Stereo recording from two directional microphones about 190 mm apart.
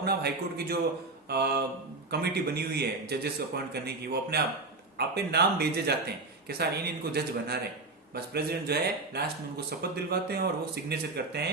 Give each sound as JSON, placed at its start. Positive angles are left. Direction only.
{"t": 0.0, "sound": "a man's voice", "side_deg": -55}